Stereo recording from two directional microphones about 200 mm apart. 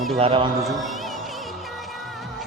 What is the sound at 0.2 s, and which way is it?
Speech, 25° right (ahead or behind).